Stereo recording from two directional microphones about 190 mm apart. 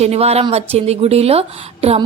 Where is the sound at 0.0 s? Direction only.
35° right (ahead or behind).